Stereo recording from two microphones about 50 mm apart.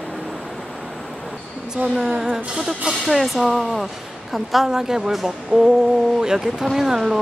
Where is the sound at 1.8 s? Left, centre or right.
Right.